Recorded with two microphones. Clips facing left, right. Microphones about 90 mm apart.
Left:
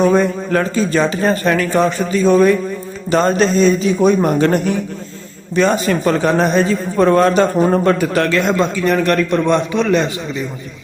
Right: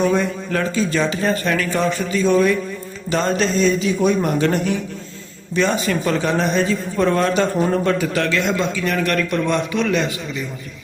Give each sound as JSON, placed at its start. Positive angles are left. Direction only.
{"t": 0.0, "sound": "a man's voice", "side_deg": 40}